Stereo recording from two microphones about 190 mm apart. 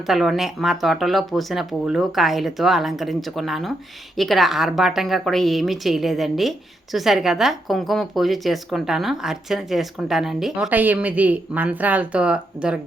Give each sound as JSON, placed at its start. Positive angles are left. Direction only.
{"t": 0.1, "sound": "a woman's voice", "side_deg": 0}